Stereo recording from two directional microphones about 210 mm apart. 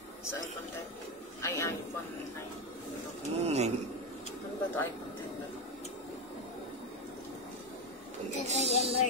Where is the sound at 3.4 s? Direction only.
30° right (ahead or behind).